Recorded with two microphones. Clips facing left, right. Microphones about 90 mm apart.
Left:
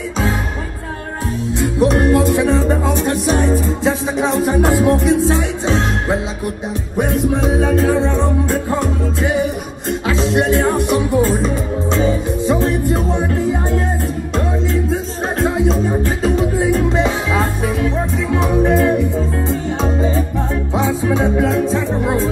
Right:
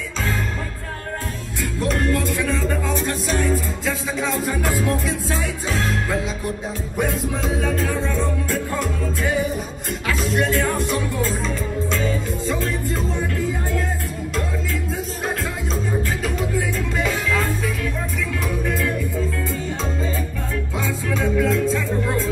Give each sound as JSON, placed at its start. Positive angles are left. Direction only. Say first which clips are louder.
{"t": 1.6, "sound": "music", "louder": "left 8 dB", "side_deg": 20}